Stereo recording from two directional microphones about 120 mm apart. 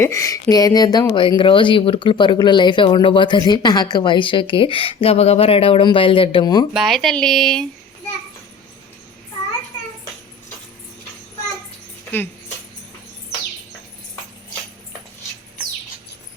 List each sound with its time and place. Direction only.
0.0 s speech: 25° left (ahead or behind); by 6.4 s 50° left (ahead or behind)
6.4 s speech: 35° left (ahead or behind)
6.7 s speech: centre (ahead or behind)